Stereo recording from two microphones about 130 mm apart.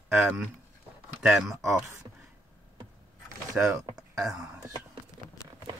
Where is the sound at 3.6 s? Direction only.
10° right (ahead or behind).